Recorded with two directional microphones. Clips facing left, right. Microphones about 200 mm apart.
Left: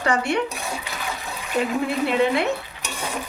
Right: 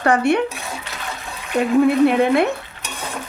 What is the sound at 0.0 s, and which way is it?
Speech, 55° right (ahead or behind).